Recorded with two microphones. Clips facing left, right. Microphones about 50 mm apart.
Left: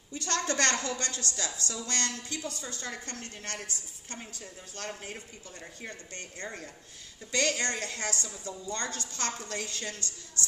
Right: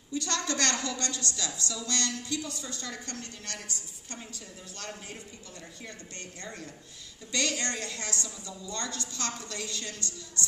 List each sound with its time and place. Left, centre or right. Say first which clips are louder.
0.1 s a woman's voice: even; left